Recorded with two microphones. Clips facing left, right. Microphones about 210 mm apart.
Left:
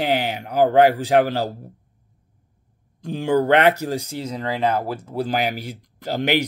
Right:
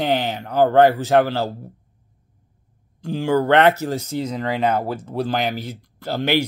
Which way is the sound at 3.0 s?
20° left (ahead or behind).